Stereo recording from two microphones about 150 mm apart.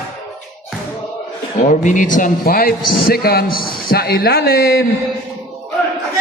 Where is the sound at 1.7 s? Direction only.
55° left (ahead or behind); by 4.9 s 90° left.